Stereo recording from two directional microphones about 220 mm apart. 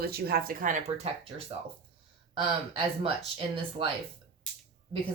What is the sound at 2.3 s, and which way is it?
A woman's voice, 25° right (ahead or behind).